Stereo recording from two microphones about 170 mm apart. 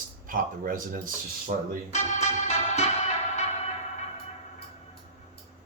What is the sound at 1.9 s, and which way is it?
Music, 40° left (ahead or behind).